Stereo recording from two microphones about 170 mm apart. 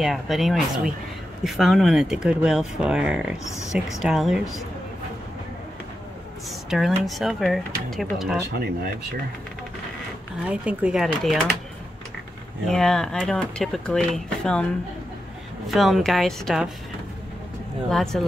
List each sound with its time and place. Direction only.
0.0 s speech: centre (ahead or behind)
3.4 s speech: 20° left (ahead or behind)
4.0 s speech: centre (ahead or behind)
6.7 s speech: centre (ahead or behind)
8.5 s speech: 70° right (ahead or behind)
10.4 s speech: 5° right (ahead or behind)
12.6 s speech: 5° left (ahead or behind)
15.7 s speech: centre (ahead or behind)
17.8 s speech: centre (ahead or behind)